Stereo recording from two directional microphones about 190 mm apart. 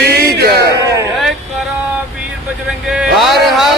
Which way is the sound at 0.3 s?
60° right (ahead or behind).